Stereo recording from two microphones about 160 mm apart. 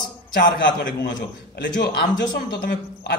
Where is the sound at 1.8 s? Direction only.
90° left.